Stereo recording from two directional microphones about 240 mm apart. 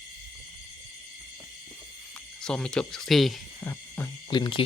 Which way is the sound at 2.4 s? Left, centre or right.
Centre.